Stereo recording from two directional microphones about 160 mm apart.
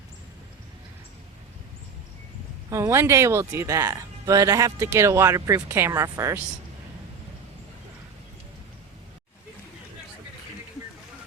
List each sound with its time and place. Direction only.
2.6 s speech: 15° right (ahead or behind)